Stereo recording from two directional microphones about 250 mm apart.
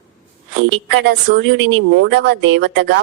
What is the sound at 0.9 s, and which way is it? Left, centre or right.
A woman's voice, right.